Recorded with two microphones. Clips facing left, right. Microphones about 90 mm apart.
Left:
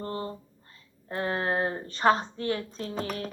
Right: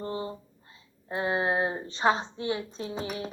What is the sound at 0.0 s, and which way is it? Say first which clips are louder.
A woman's voice: even; 15° right (ahead or behind).